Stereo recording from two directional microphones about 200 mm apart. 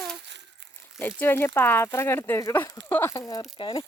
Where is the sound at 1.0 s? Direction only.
10° left (ahead or behind).